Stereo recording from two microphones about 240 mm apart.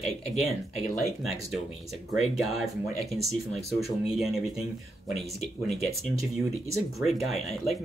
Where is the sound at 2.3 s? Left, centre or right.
Centre.